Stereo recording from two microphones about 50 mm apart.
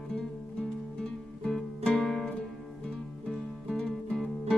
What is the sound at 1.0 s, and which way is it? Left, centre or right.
Music, centre.